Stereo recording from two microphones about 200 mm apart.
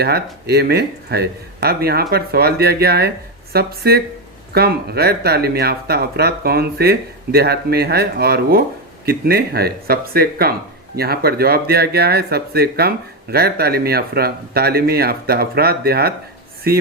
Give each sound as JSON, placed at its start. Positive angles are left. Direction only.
{"t": 0.0, "sound": "speech", "side_deg": -55}